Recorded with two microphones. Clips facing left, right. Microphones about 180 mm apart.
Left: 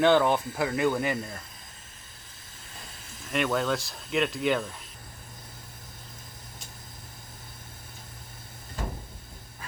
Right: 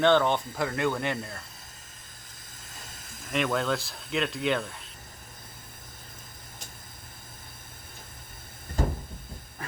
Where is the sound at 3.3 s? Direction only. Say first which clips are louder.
Left 1 dB; centre (ahead or behind).